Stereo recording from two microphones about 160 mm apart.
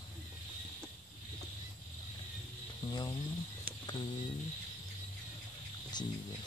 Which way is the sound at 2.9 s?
25° left (ahead or behind).